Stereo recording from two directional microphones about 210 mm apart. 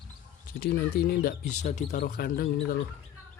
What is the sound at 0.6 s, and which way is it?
Speech, 45° left (ahead or behind).